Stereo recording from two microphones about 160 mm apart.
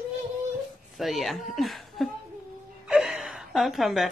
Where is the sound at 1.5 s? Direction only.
Centre (ahead or behind).